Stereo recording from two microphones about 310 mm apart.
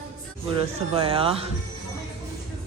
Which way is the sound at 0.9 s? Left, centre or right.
Centre.